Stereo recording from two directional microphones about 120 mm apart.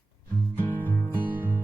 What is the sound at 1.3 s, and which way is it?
Music, 20° right (ahead or behind).